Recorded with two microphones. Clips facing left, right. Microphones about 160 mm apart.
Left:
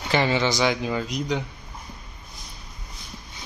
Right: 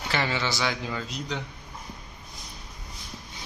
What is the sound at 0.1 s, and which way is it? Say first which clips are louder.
A man's voice: left 7 dB; 20° left (ahead or behind).